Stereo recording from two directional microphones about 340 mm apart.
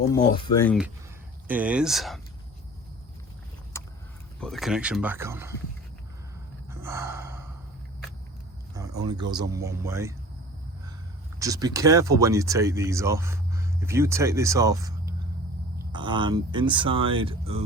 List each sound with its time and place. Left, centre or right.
0.5 s speech: centre
4.4 s speech: centre
6.7 s gasp: centre
8.7 s speech: centre
11.3 s speech: centre